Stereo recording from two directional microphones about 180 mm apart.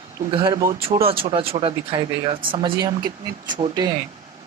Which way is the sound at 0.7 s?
30° right (ahead or behind).